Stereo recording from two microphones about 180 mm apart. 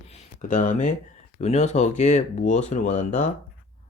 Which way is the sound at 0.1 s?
45° left (ahead or behind).